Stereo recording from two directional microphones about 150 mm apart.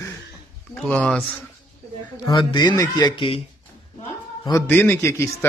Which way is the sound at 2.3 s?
35° left (ahead or behind).